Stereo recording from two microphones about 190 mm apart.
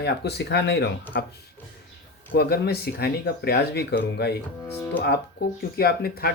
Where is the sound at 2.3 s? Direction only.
55° left (ahead or behind).